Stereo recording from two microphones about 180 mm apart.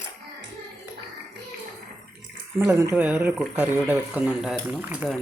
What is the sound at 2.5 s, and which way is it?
Speech, 15° right (ahead or behind).